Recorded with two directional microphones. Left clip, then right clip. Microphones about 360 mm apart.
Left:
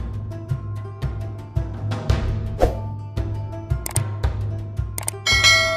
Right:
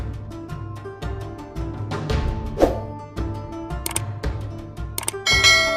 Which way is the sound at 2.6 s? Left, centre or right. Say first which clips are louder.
Right 3 dB; centre.